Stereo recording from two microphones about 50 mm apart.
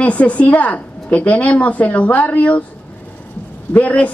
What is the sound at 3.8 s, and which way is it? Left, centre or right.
Speech, left.